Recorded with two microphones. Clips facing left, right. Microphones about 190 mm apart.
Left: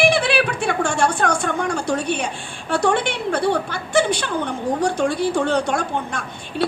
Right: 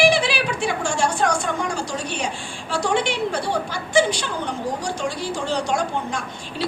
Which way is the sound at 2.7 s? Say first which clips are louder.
Left 3 dB; 55° left (ahead or behind).